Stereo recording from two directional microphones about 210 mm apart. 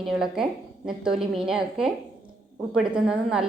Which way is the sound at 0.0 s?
Centre (ahead or behind).